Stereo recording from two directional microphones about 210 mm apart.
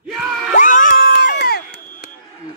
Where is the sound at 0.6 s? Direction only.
40° left (ahead or behind).